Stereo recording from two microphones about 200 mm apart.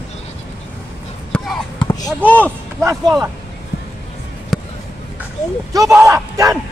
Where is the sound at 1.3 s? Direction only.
5° left (ahead or behind).